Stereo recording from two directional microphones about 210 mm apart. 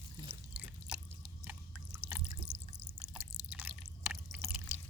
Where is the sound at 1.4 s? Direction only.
10° right (ahead or behind).